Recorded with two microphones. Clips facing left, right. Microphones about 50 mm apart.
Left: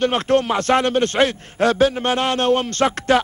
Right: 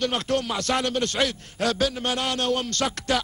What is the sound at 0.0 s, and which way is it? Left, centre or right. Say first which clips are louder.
A man's voice: left 7 dB; left.